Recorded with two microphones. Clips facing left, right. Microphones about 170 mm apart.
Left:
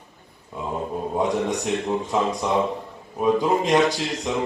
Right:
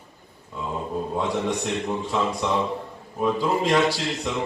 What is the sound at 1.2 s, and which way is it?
A man's voice, 20° left (ahead or behind).